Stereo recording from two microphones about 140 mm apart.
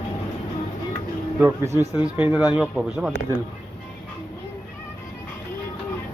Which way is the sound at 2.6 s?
5° right (ahead or behind).